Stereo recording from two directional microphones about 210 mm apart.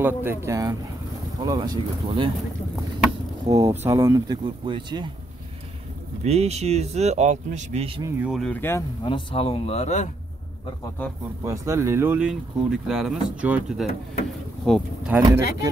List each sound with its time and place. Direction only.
0.0 s speech: 10° right (ahead or behind)
3.4 s speech: 15° right (ahead or behind)
6.2 s speech: 30° right (ahead or behind)
8.2 s speech: centre (ahead or behind)
9.0 s speech: 25° left (ahead or behind)
11.4 s speech: 15° right (ahead or behind)
14.2 s a sound: centre (ahead or behind)
15.2 s speech: 15° right (ahead or behind)